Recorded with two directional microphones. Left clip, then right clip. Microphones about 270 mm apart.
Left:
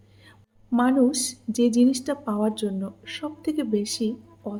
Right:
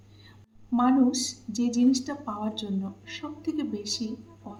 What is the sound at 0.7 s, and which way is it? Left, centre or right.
A woman's voice, left.